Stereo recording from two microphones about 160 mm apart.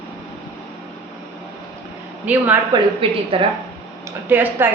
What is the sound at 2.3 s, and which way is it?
Speech, 10° right (ahead or behind).